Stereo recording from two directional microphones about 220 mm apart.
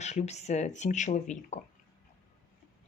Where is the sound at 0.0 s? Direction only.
30° left (ahead or behind).